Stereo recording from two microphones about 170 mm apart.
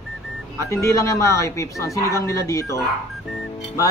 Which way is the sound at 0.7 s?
15° left (ahead or behind).